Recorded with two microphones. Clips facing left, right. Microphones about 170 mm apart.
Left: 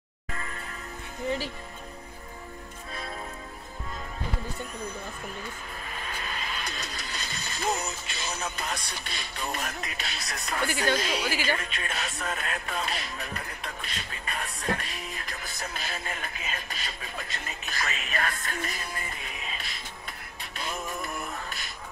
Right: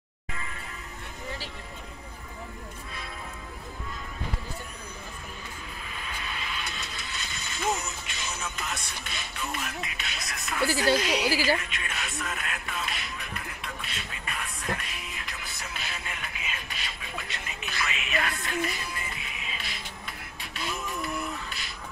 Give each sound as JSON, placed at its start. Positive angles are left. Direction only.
{"t": 0.3, "sound": "music", "side_deg": 45}
{"t": 6.2, "sound": "speech", "side_deg": 40}
{"t": 10.7, "sound": "a woman's voice", "side_deg": -35}
{"t": 11.5, "sound": "speech", "side_deg": 35}
{"t": 20.5, "sound": "music", "side_deg": 45}